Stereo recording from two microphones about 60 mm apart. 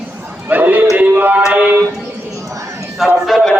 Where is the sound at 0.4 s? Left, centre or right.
Right.